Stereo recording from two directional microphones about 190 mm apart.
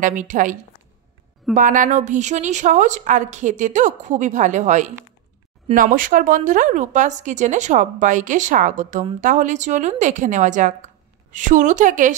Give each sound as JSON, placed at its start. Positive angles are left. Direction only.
{"t": 0.0, "sound": "a woman's voice", "side_deg": -40}